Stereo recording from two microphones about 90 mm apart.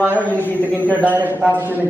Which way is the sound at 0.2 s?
20° left (ahead or behind).